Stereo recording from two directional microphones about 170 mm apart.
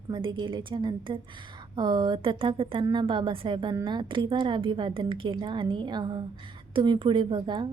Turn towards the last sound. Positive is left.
turn(degrees=-25)  # may be behind; listen again after turning